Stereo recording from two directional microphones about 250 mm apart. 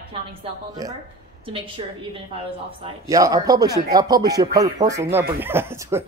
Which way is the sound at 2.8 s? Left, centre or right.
Centre.